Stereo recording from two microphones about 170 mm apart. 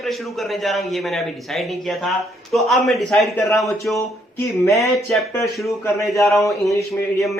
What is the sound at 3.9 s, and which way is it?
Speech, 15° left (ahead or behind).